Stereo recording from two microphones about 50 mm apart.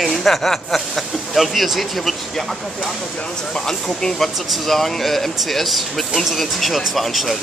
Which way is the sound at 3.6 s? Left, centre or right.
Centre.